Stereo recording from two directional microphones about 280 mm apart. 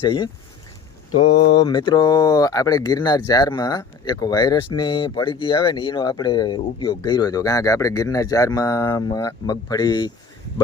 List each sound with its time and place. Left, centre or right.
0.0 s speech: centre